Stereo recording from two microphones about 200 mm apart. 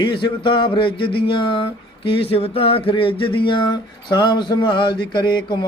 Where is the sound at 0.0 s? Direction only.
25° left (ahead or behind).